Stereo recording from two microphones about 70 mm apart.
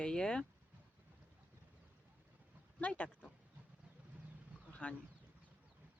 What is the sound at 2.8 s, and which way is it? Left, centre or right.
Speech, centre.